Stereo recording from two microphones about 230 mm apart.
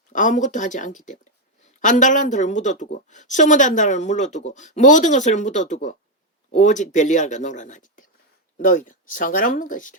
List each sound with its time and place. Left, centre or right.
0.1 s a woman's voice: left